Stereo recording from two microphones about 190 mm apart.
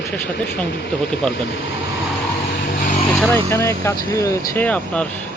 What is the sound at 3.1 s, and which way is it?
Speech, 10° left (ahead or behind).